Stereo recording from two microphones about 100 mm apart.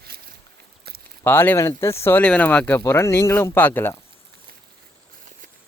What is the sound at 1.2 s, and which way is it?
Speech, 20° left (ahead or behind).